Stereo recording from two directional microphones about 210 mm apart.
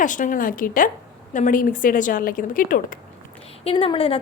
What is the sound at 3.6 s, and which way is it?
Speech, 25° left (ahead or behind).